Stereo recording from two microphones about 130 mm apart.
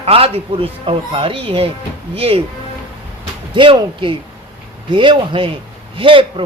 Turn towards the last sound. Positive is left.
turn(degrees=-40)  # may be behind; listen again after turning